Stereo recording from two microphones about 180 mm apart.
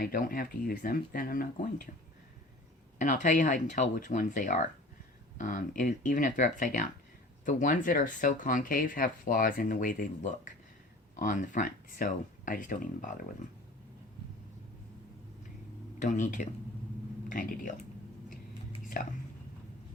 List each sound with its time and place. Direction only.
0.0 s speech: 55° left (ahead or behind)
3.0 s speech: 45° left (ahead or behind)
16.0 s speech: 40° left (ahead or behind)